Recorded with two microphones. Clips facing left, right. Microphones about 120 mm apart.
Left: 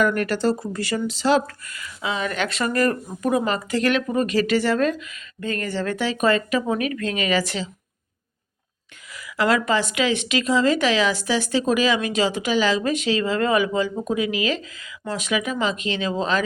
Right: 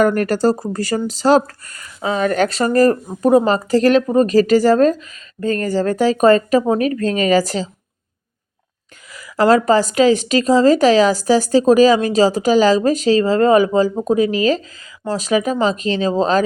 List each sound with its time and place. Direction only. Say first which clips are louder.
0.0 s speech: right 6 dB; 40° right (ahead or behind)
9.1 s speech: right 8 dB; 40° right (ahead or behind)